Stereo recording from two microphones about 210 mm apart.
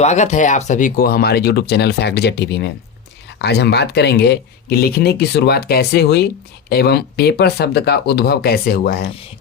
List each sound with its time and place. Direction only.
0.0 s speech: 35° left (ahead or behind)